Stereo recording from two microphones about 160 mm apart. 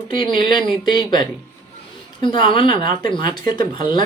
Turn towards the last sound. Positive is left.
turn(degrees=30)  # may be behind; listen again after turning